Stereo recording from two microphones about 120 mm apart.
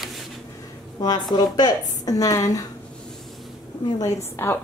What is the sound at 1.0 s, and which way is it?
A woman's voice, 35° left (ahead or behind).